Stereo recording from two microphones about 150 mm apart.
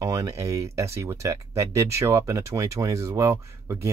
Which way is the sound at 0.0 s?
20° right (ahead or behind).